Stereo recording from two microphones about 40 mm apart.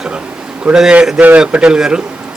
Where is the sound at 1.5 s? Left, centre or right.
Right.